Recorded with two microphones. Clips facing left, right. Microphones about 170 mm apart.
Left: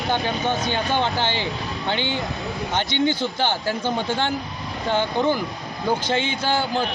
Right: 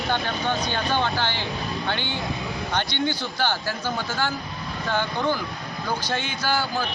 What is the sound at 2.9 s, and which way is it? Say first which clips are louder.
Speech: left 5 dB; 15° left (ahead or behind).